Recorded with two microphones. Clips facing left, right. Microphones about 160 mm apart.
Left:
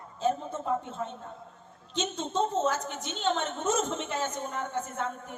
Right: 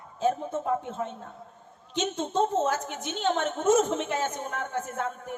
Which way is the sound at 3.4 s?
55° right (ahead or behind).